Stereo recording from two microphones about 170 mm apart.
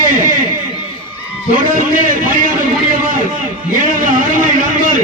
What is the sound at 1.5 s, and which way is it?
A man's voice, 50° right (ahead or behind).